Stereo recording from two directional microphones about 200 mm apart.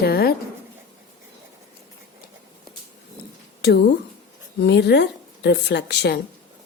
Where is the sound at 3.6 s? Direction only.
55° left (ahead or behind).